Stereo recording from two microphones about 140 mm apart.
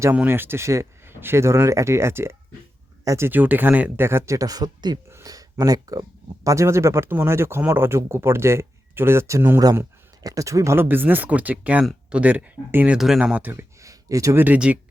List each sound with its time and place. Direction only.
0.0 s speech: 15° right (ahead or behind)
14.4 s speech: 10° right (ahead or behind)